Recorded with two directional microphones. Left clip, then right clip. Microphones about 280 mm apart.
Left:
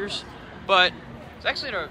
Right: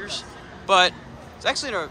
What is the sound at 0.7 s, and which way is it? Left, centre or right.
Speech, centre.